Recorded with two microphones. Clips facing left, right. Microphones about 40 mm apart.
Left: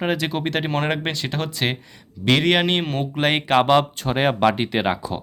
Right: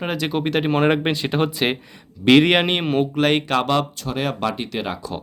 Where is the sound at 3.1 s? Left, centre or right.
Centre.